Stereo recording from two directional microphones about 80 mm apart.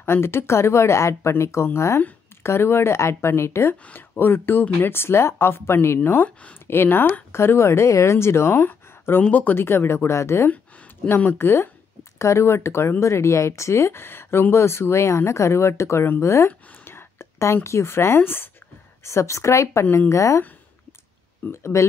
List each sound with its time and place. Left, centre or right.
0.0 s speech: left
21.5 s speech: left